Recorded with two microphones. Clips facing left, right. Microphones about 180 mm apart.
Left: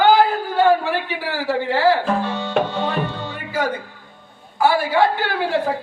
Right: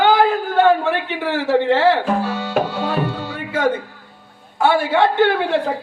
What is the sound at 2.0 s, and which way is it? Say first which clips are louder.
Music: right 1 dB; 10° right (ahead or behind).